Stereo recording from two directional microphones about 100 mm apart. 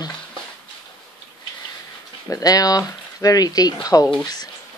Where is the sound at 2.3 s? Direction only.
35° left (ahead or behind).